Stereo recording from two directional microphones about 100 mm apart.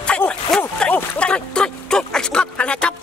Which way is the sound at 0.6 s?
15° left (ahead or behind).